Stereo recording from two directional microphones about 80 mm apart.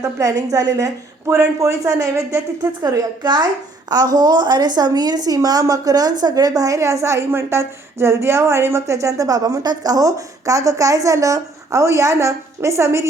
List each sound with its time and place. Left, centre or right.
0.0 s a woman's voice: right
2.8 s a woman's voice: right